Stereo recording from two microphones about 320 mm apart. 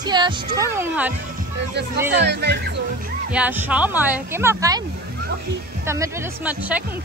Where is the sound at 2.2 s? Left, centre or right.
Right.